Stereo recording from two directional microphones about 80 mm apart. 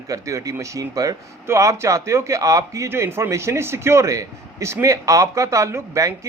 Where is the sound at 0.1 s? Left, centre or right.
Right.